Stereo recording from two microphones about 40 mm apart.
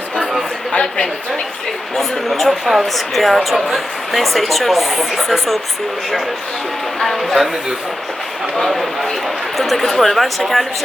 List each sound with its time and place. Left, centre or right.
0.7 s a woman's voice: centre
2.0 s speech: centre
7.0 s speech: centre
8.5 s speech: centre